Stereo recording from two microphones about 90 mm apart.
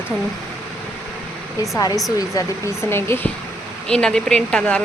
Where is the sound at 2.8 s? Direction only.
30° left (ahead or behind).